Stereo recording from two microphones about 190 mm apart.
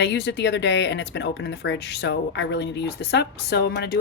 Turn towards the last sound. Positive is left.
turn(degrees=60)  # may be behind; listen again after turning